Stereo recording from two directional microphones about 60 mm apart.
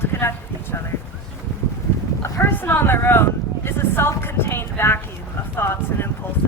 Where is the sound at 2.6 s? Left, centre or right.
Left.